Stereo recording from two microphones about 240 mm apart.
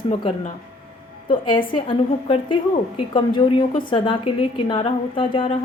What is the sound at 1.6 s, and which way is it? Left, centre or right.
A woman's voice, left.